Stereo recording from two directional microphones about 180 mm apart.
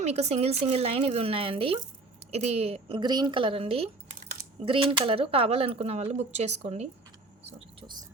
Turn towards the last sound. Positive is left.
turn(degrees=-35)  # may be behind; listen again after turning